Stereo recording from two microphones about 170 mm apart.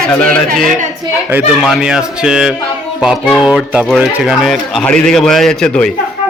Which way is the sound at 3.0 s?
5° right (ahead or behind).